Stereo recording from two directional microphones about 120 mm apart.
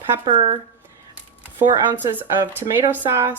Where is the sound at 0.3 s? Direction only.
45° right (ahead or behind).